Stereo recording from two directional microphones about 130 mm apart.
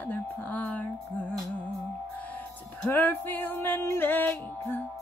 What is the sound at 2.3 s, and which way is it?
Music, 15° left (ahead or behind).